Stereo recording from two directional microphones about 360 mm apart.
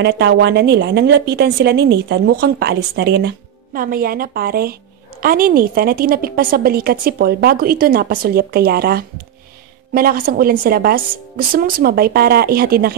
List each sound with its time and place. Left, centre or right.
0.0 s a woman's voice: right